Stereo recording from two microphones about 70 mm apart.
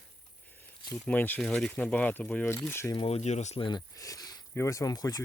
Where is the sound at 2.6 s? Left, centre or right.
Left.